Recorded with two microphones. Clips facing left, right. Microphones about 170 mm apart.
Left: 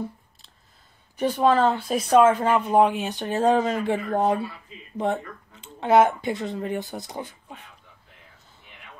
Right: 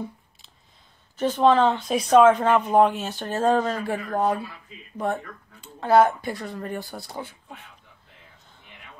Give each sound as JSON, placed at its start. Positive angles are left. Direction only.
{"t": 1.1, "sound": "speech", "side_deg": 10}